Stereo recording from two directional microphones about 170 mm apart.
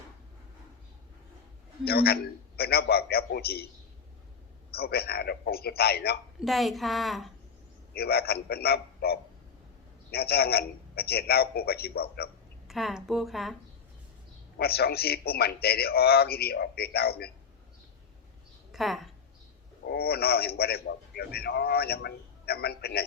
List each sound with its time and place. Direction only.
1.8 s a man's voice: 65° left (ahead or behind)
4.7 s a man's voice: 65° left (ahead or behind)
6.4 s speech: centre (ahead or behind)
7.9 s a man's voice: 65° left (ahead or behind)
12.6 s speech: centre (ahead or behind)
14.6 s a man's voice: 65° left (ahead or behind)
18.7 s a woman's voice: centre (ahead or behind)
19.8 s a man's voice: 65° left (ahead or behind)